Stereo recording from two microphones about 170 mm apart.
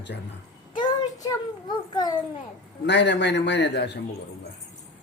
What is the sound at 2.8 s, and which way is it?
A man's voice, 90° left.